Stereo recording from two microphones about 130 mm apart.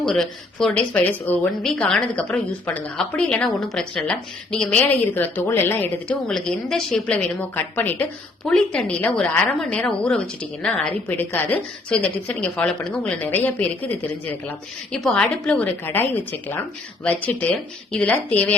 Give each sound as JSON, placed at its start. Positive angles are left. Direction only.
{"t": 0.1, "sound": "a woman's voice", "side_deg": 5}